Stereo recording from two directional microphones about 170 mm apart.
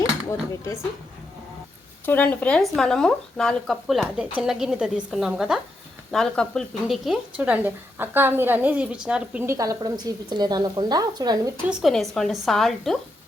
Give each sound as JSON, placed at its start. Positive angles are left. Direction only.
{"t": 0.3, "sound": "speech", "side_deg": 15}
{"t": 2.0, "sound": "speech", "side_deg": 10}
{"t": 11.7, "sound": "speech", "side_deg": 0}